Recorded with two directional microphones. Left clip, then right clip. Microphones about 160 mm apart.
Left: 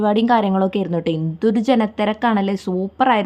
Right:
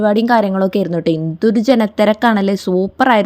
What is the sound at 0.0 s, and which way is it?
Speech, 15° right (ahead or behind).